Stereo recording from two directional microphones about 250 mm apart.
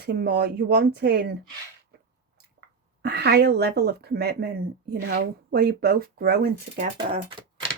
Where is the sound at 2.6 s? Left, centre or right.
Right.